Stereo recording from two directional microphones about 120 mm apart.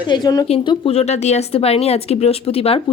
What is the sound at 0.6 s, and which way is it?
Speech, 55° left (ahead or behind).